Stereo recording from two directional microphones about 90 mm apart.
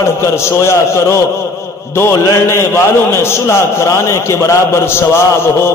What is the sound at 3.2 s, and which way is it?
A man's voice, 30° left (ahead or behind).